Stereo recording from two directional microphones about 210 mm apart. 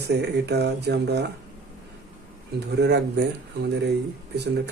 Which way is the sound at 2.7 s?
55° right (ahead or behind).